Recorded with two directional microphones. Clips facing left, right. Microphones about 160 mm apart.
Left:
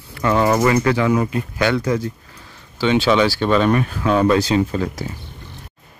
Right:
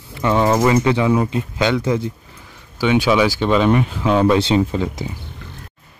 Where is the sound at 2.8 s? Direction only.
10° right (ahead or behind).